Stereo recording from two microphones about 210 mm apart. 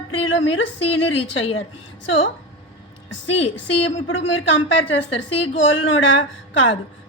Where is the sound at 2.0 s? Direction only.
65° left (ahead or behind).